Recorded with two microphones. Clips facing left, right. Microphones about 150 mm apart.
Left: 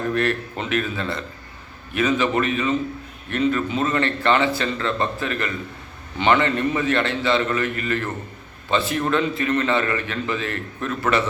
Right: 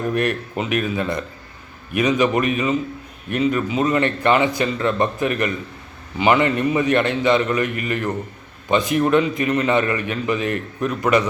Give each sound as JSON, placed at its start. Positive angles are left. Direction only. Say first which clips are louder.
{"t": 0.1, "sound": "a man's voice", "louder": "right 1 dB", "side_deg": -15}